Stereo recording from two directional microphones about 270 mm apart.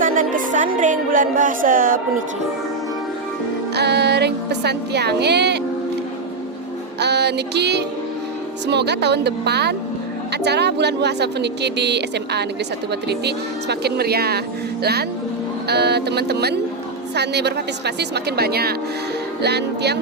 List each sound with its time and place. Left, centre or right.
0.0 s music: right
3.8 s speech: right
7.0 s speech: right